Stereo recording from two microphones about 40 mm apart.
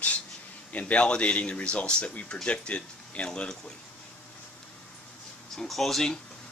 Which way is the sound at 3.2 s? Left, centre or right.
Centre.